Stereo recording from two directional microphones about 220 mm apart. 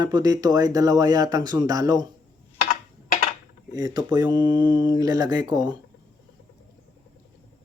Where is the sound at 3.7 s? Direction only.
20° right (ahead or behind).